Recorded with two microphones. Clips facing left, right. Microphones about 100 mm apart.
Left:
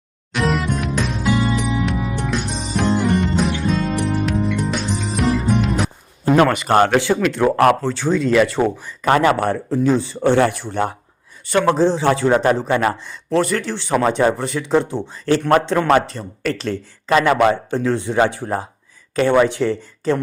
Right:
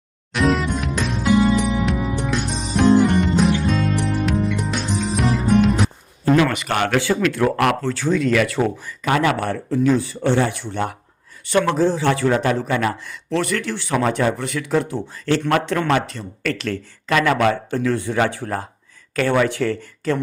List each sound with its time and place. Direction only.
0.3 s music: centre (ahead or behind)
6.5 s speech: 35° left (ahead or behind)
6.9 s speech: 20° left (ahead or behind)
7.7 s speech: 30° left (ahead or behind)
9.0 s speech: 40° left (ahead or behind)
10.2 s speech: 50° left (ahead or behind)
11.7 s speech: 30° left (ahead or behind)